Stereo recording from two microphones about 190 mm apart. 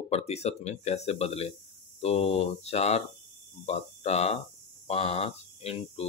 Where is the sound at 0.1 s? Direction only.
35° left (ahead or behind).